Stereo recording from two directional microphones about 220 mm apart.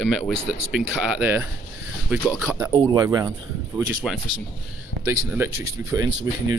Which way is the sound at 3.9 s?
5° right (ahead or behind).